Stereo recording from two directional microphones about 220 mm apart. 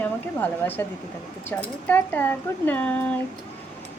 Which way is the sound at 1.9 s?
10° left (ahead or behind).